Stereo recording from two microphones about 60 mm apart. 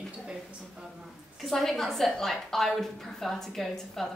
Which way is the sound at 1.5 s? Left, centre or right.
Centre.